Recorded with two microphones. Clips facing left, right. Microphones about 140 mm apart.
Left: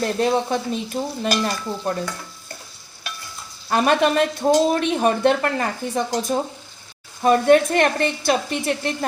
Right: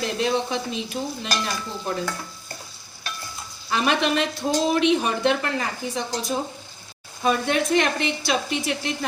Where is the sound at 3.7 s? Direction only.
45° left (ahead or behind).